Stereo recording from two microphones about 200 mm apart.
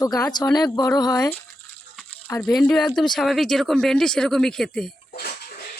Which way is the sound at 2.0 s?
5° left (ahead or behind).